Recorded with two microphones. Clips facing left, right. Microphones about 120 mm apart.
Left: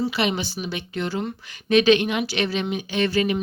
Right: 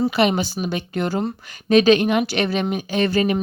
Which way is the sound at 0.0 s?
45° right (ahead or behind).